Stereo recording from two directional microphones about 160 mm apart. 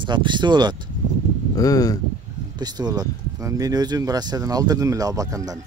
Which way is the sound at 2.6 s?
25° right (ahead or behind).